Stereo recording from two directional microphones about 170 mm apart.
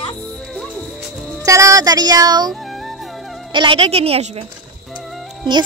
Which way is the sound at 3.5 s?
30° right (ahead or behind).